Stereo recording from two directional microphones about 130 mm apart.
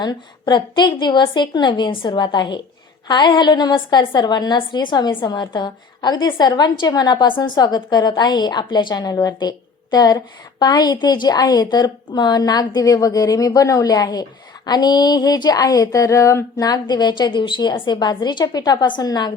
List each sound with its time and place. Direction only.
0.0 s a woman's voice: 35° left (ahead or behind)